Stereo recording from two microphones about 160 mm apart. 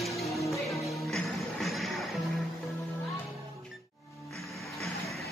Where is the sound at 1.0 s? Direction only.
Centre (ahead or behind).